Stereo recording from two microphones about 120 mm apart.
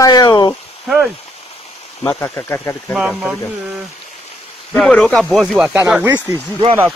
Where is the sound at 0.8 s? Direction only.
5° right (ahead or behind).